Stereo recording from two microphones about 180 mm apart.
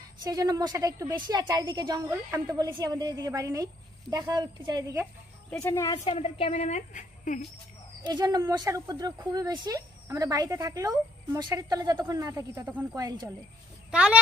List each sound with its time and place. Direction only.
0.2 s speech: 20° right (ahead or behind)
5.5 s speech: 15° left (ahead or behind)
6.0 s a woman's voice: 30° left (ahead or behind)
8.0 s speech: 25° right (ahead or behind)
13.0 s speech: 25° right (ahead or behind)
13.8 s speech: 5° right (ahead or behind)